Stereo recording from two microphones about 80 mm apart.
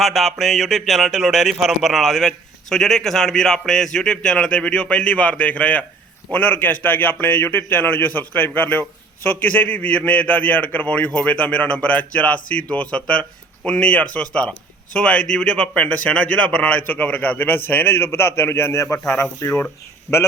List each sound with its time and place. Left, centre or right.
0.0 s a man's voice: centre; by 19.6 s left
20.1 s speech: centre